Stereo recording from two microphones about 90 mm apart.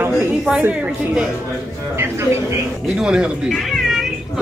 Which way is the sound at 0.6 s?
15° right (ahead or behind).